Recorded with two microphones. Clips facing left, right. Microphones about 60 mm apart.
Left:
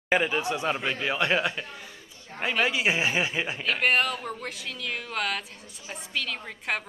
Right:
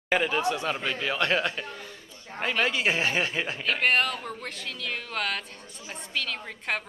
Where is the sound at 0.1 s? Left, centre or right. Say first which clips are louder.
Even; centre.